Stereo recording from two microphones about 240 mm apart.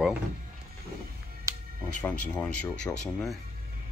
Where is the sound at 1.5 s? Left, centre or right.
Centre.